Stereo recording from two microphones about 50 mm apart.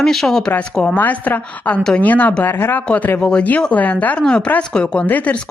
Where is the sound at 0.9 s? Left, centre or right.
Left.